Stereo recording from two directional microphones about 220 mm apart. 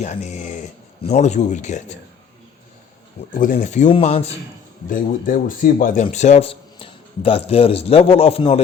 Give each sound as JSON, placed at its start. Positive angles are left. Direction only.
{"t": 0.0, "sound": "speech", "side_deg": 30}
{"t": 3.3, "sound": "speech", "side_deg": 35}